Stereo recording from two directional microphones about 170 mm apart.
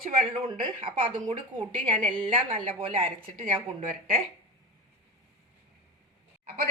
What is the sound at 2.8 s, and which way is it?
Speech, 30° right (ahead or behind).